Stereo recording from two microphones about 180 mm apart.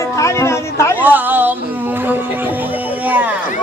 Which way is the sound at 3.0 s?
10° right (ahead or behind).